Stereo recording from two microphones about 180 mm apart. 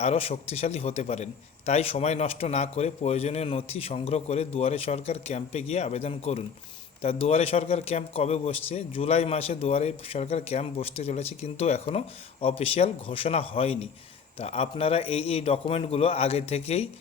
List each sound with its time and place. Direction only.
0.0 s a man's voice: 35° left (ahead or behind)